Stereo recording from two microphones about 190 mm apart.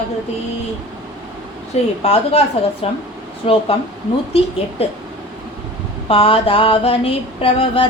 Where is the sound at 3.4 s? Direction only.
30° left (ahead or behind).